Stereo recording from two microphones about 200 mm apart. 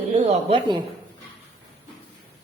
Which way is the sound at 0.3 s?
25° right (ahead or behind).